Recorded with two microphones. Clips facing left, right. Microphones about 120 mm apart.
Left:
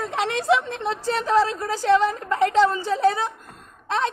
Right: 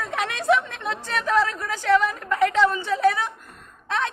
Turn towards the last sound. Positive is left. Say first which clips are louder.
# left 2 dB
turn(degrees=30)  # may be behind; listen again after turning